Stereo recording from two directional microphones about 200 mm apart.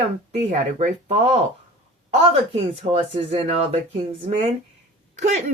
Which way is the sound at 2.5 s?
30° right (ahead or behind).